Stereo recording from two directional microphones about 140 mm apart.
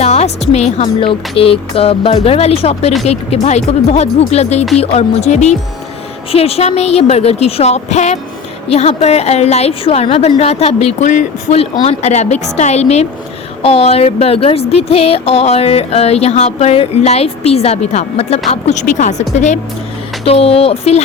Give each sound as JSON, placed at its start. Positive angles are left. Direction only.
{"t": 0.0, "sound": "a woman's voice", "side_deg": 50}
{"t": 11.5, "sound": "speech", "side_deg": 45}
{"t": 20.2, "sound": "speech", "side_deg": 45}